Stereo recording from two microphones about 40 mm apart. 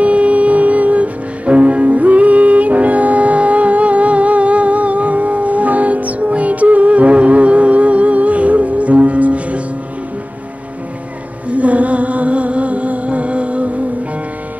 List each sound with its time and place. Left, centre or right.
0.0 s music: right
11.4 s music: right